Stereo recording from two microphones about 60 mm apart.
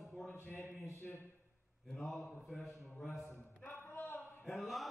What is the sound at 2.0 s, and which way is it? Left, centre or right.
A man's voice, centre.